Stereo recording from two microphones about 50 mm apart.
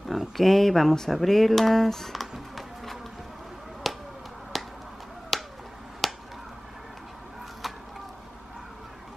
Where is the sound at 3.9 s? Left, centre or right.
Centre.